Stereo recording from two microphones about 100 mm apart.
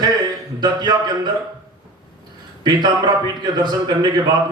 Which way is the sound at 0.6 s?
45° right (ahead or behind).